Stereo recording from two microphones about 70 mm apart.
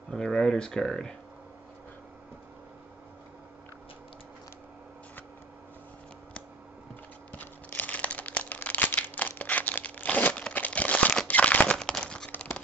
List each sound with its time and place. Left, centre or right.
0.1 s speech: centre
7.3 s a sound: left
11.7 s crumpling: centre